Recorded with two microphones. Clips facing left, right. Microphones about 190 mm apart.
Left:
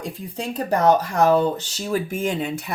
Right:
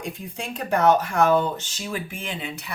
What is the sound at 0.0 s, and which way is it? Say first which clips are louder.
Speech: left 3 dB; 35° left (ahead or behind).